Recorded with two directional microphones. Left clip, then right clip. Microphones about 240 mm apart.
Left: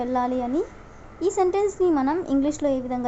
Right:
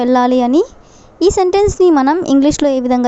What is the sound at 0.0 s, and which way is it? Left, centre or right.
A woman's voice, right.